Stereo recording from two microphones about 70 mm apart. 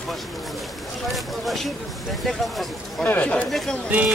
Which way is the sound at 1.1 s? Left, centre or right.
Centre.